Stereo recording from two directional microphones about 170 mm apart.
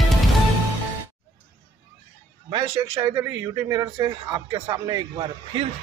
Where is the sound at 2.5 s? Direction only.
25° right (ahead or behind).